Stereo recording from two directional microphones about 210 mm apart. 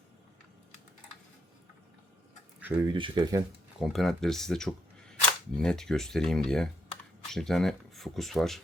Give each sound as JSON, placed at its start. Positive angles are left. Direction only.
{"t": 2.6, "sound": "speech", "side_deg": -10}
{"t": 2.9, "sound": "speech", "side_deg": -20}
{"t": 3.8, "sound": "speech", "side_deg": 0}